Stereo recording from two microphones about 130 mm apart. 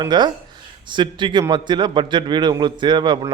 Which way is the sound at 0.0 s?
35° right (ahead or behind).